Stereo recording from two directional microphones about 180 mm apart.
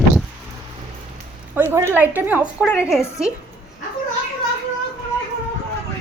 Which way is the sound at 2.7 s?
15° left (ahead or behind).